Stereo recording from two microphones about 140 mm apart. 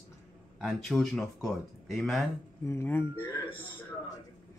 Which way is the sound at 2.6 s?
20° left (ahead or behind).